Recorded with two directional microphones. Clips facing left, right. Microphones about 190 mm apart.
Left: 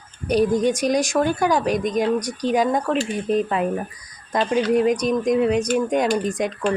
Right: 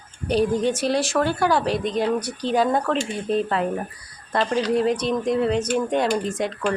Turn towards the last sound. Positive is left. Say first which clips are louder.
# left 2 dB
turn(degrees=15)  # may be behind; listen again after turning